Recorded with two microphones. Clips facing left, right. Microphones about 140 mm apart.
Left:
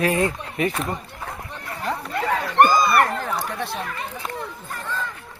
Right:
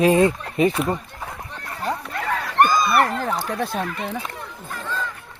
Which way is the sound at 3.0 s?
35° right (ahead or behind).